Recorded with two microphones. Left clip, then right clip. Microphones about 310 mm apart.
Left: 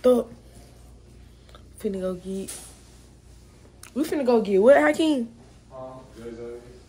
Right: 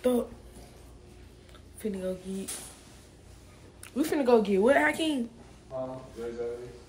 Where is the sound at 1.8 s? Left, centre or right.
Centre.